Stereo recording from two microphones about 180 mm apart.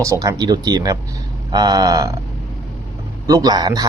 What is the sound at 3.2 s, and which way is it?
Speech, 20° right (ahead or behind).